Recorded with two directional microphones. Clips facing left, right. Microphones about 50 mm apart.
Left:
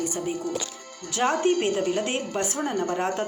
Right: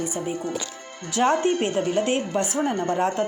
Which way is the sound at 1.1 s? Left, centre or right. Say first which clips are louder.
Right 2 dB; right.